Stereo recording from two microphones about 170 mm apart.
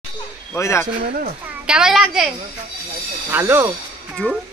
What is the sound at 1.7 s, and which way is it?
Speech, 5° right (ahead or behind).